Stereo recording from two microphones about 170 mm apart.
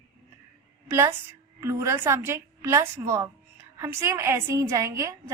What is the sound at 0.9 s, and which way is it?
A woman's voice, 15° right (ahead or behind).